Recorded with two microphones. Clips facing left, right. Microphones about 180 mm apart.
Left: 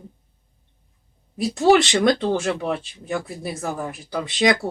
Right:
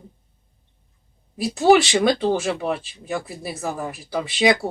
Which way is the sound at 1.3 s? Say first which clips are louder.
Right 1 dB; 5° right (ahead or behind).